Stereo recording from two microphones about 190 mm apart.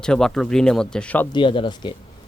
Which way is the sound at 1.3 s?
25° left (ahead or behind).